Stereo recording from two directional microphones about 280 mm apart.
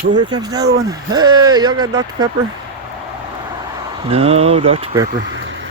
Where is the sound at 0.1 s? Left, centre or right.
Centre.